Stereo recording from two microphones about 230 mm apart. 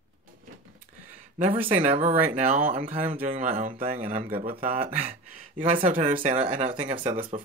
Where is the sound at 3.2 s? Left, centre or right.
Right.